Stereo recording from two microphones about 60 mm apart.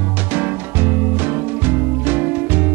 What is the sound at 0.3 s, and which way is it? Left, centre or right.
Music, right.